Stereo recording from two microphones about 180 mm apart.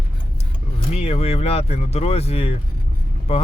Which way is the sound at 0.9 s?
35° left (ahead or behind).